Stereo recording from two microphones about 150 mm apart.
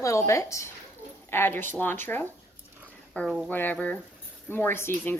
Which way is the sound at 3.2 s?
Centre (ahead or behind).